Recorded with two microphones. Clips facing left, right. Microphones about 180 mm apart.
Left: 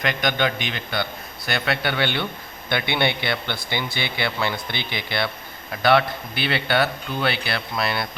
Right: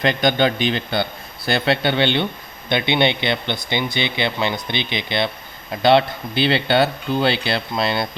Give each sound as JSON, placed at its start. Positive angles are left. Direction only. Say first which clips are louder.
{"t": 0.0, "sound": "speech", "louder": "right 5 dB", "side_deg": -30}